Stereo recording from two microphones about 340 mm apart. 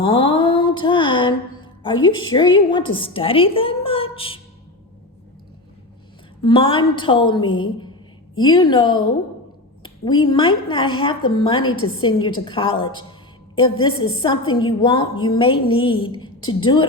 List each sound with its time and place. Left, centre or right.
0.0 s a sound: centre
2.0 s a woman's voice: centre
6.4 s a woman's voice: centre